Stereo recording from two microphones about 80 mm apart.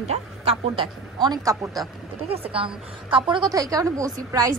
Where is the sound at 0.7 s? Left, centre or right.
Right.